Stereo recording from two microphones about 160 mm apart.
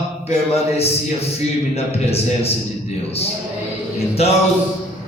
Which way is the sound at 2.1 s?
40° left (ahead or behind).